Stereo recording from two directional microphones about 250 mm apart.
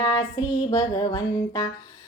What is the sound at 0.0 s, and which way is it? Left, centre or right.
Child singing, centre.